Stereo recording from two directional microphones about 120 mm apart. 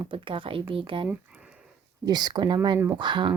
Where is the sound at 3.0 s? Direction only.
40° right (ahead or behind).